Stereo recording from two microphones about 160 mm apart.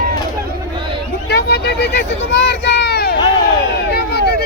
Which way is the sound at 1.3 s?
90° left.